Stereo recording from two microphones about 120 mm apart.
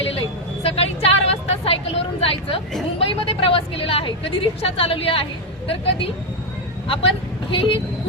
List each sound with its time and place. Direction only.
0.6 s vehicle: 55° left (ahead or behind)
3.0 s a woman's voice: 50° left (ahead or behind)